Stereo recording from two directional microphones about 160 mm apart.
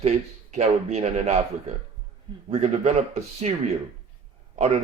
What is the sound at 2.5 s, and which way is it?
Speech, 45° right (ahead or behind).